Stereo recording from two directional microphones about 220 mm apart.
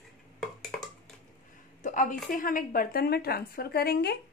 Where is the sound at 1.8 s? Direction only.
35° left (ahead or behind).